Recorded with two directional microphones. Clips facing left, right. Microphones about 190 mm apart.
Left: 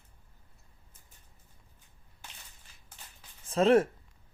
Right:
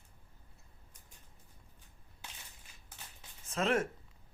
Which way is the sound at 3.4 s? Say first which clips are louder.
Left 9 dB; 30° left (ahead or behind).